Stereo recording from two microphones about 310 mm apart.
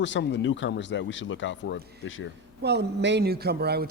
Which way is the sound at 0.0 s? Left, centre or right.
Left.